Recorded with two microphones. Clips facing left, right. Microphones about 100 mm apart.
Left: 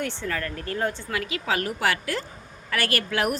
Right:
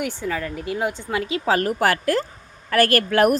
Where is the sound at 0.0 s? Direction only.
10° right (ahead or behind).